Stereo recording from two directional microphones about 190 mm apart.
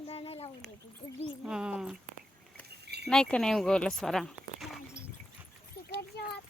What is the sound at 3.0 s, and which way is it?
Speech, 5° left (ahead or behind).